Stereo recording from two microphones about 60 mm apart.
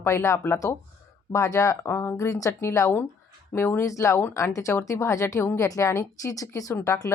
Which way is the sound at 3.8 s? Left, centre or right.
Left.